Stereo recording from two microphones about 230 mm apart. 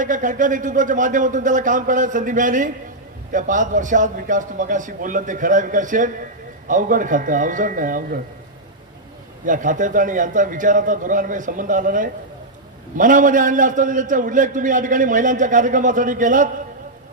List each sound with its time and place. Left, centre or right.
0.0 s a man's voice: right
9.5 s a man's voice: right